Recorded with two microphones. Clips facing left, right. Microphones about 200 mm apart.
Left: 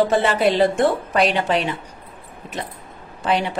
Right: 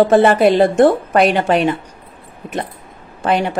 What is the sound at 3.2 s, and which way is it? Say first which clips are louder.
Speech: right 4 dB; 50° right (ahead or behind).